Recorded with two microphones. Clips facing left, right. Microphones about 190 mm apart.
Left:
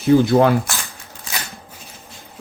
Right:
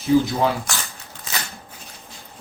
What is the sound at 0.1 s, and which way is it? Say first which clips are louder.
Speech: left 5 dB; 60° left (ahead or behind).